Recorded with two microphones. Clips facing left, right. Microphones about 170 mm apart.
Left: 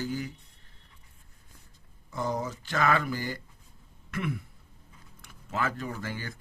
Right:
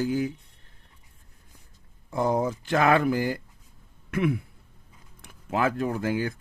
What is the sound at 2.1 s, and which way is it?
Speech, 55° right (ahead or behind).